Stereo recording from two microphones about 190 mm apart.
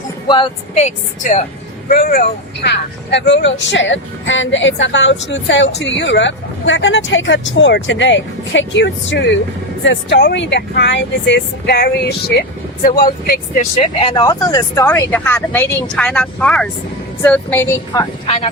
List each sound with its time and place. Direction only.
0.3 s speech: 25° left (ahead or behind)
0.8 s a woman's voice: 40° left (ahead or behind)
1.9 s speech: 50° left (ahead or behind)
13.6 s speech: 30° left (ahead or behind); by 18.0 s 15° left (ahead or behind)
18.3 s a woman's voice: 30° left (ahead or behind)